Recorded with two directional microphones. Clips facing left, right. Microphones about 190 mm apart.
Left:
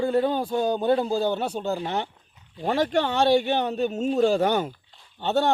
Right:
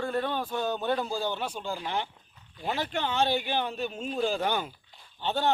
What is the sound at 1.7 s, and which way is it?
Speech, 25° left (ahead or behind).